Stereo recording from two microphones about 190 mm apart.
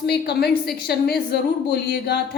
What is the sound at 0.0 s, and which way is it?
A woman's voice, 60° left (ahead or behind).